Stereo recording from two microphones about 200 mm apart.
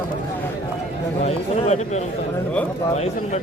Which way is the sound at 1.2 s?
35° left (ahead or behind).